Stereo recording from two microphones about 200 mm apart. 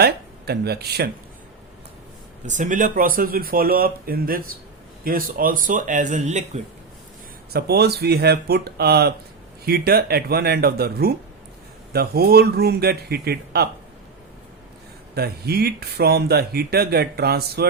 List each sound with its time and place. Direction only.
0.0 s speech: 55° right (ahead or behind)
2.5 s speech: 40° right (ahead or behind)
7.5 s speech: 55° right (ahead or behind)
15.1 s speech: 50° right (ahead or behind)